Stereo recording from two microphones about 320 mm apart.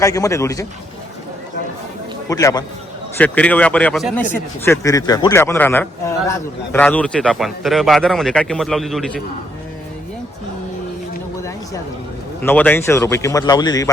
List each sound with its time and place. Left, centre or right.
0.0 s a man's voice: centre
2.3 s a man's voice: centre
11.3 s a sound: centre
12.4 s a man's voice: centre